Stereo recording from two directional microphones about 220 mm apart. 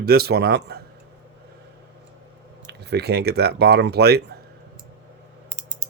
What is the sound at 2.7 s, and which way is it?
Speech, 50° right (ahead or behind).